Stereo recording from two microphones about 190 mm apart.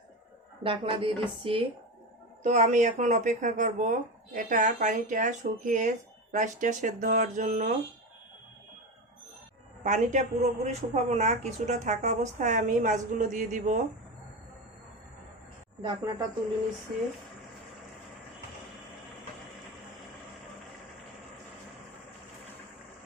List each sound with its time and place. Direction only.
0.6 s speech: 30° right (ahead or behind)
9.8 s speech: 40° right (ahead or behind)
15.8 s speech: 20° right (ahead or behind)